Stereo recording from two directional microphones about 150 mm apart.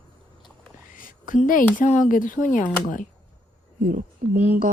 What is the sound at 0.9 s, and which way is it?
Speech, 65° left (ahead or behind).